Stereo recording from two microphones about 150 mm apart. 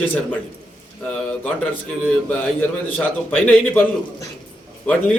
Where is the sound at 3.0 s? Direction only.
10° left (ahead or behind).